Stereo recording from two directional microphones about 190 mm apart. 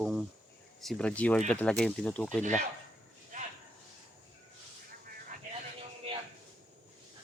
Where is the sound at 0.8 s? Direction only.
5° left (ahead or behind).